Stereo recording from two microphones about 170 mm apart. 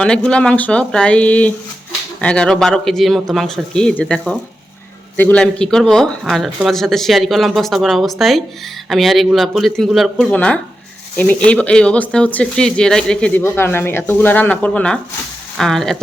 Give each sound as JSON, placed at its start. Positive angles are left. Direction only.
{"t": 0.0, "sound": "speech", "side_deg": 5}